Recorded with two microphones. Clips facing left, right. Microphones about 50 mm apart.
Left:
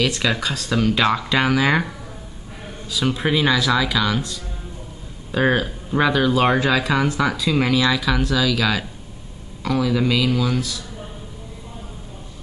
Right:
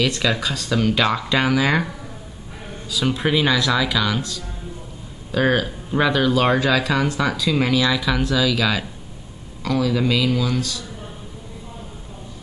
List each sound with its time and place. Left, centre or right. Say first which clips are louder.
0.2 s a man's voice: even; centre